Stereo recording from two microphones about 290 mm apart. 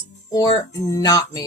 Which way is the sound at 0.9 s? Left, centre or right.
Centre.